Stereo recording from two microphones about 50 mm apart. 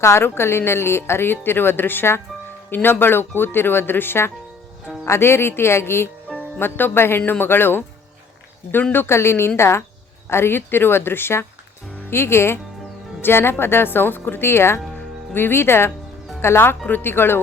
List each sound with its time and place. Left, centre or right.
0.0 s speech: left
5.0 s speech: left
6.6 s speech: left
7.2 s speech: left
8.9 s speech: left